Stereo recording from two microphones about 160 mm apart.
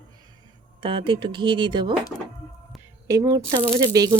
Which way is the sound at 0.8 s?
35° right (ahead or behind).